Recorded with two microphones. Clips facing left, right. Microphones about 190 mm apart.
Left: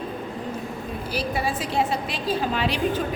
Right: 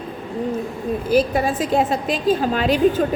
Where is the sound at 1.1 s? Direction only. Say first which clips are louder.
Right 9 dB; 45° right (ahead or behind).